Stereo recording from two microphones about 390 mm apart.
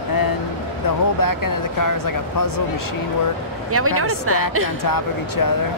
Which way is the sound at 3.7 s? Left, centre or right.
Right.